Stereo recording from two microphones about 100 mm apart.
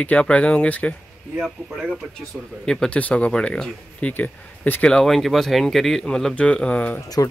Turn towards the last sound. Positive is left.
turn(degrees=35)  # may be behind; listen again after turning